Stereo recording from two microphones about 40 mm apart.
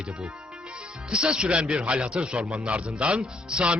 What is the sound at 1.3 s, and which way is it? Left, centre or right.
A man's voice, right.